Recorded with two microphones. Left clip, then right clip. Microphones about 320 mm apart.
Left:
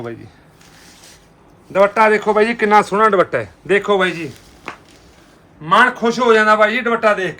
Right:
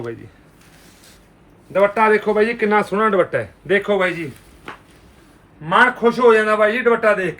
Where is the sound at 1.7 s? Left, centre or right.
Left.